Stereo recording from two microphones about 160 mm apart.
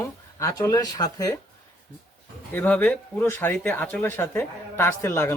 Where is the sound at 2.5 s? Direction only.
10° left (ahead or behind).